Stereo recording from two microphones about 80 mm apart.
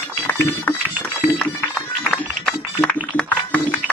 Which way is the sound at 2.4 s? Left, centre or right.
Centre.